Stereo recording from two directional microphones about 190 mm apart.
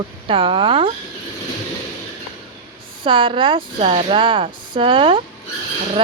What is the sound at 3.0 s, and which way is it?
A woman's voice, 25° right (ahead or behind).